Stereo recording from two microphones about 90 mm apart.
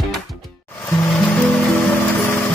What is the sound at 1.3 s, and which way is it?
Music, 10° left (ahead or behind).